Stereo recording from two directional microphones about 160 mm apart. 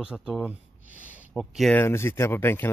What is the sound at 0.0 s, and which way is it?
Speech, 5° right (ahead or behind).